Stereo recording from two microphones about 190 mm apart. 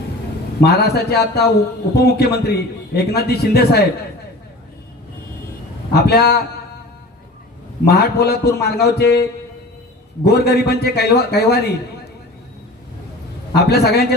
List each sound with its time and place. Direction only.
0.6 s a man's voice: 60° left (ahead or behind)
5.9 s a man's voice: 55° left (ahead or behind)
7.9 s a man's voice: 60° left (ahead or behind)
10.2 s a man's voice: 60° left (ahead or behind)
13.5 s a man's voice: 55° left (ahead or behind)